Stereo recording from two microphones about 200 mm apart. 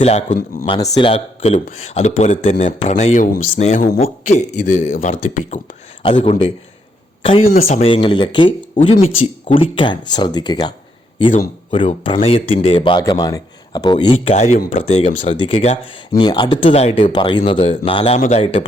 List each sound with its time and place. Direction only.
0.0 s speech: 35° left (ahead or behind)
0.7 s speech: 25° left (ahead or behind)
1.4 s speech: 35° left (ahead or behind)
6.0 s speech: 25° left (ahead or behind)